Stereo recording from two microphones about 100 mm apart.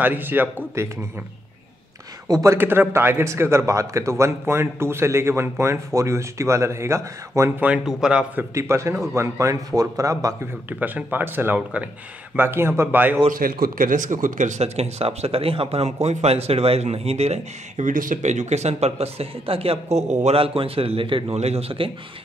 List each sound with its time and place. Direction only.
0.0 s a man's voice: 20° right (ahead or behind)
2.2 s speech: 40° right (ahead or behind)
2.5 s a man's voice: 20° right (ahead or behind)
7.6 s speech: 10° right (ahead or behind)
8.4 s a man's voice: 30° right (ahead or behind)
10.7 s a man's voice: 15° right (ahead or behind)
14.1 s speech: 90° right
18.5 s speech: 90° right
20.2 s a man's voice: 70° right (ahead or behind)